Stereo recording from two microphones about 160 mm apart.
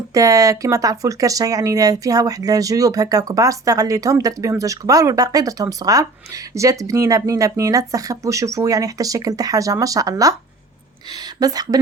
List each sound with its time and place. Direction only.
0.1 s speech: 20° right (ahead or behind)